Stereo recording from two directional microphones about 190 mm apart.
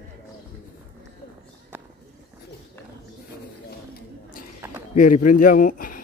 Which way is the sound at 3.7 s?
55° left (ahead or behind).